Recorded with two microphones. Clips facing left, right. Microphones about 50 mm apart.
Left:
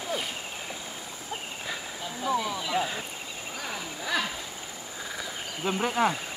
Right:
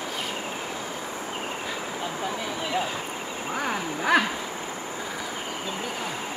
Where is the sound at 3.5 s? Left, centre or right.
Right.